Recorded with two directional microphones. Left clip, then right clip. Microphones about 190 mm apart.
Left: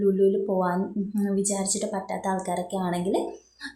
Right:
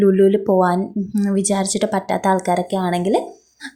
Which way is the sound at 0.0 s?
25° right (ahead or behind).